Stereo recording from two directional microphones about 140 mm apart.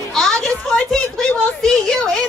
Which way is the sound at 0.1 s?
5° left (ahead or behind).